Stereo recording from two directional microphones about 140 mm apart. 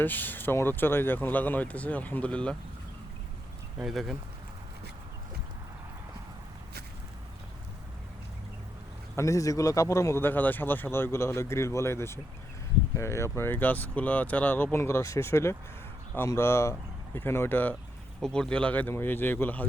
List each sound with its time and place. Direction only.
0.0 s speech: 15° left (ahead or behind)
3.8 s speech: centre (ahead or behind)
9.1 s speech: 20° left (ahead or behind)